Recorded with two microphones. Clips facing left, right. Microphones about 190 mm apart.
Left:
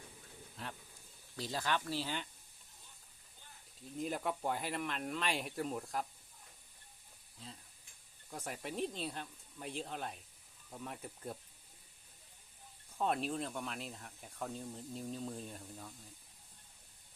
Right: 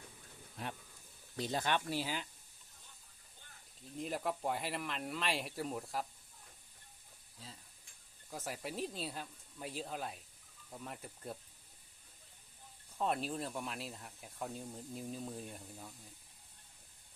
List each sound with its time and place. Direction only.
1.4 s speech: 20° right (ahead or behind)
3.9 s speech: centre (ahead or behind)
8.3 s speech: 5° right (ahead or behind)
13.0 s speech: centre (ahead or behind)